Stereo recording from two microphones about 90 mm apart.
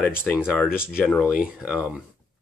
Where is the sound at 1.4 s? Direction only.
10° right (ahead or behind).